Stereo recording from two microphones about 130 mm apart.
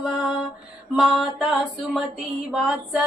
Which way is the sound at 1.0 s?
Centre (ahead or behind).